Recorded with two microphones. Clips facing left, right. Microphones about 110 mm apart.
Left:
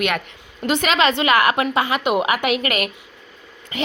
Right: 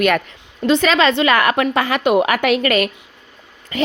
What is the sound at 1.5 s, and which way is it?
Speech, 55° right (ahead or behind).